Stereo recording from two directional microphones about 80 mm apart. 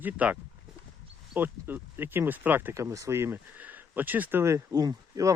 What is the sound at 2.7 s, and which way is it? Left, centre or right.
Speech, right.